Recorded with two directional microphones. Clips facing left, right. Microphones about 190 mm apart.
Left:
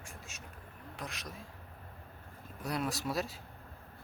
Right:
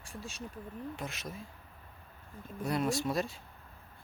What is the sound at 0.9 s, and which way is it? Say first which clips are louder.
Speech: right 3 dB; centre (ahead or behind).